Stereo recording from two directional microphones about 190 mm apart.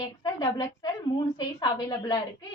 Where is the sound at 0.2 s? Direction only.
20° left (ahead or behind).